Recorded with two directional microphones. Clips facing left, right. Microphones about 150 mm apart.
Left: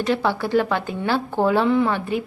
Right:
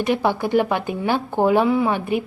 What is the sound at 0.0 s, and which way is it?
A woman's voice, 15° right (ahead or behind).